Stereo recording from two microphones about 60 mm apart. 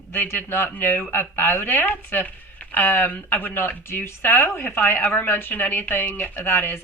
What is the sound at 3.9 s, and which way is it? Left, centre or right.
A woman's voice, left.